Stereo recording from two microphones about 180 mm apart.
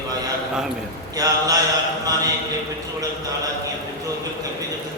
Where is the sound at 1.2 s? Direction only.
20° right (ahead or behind).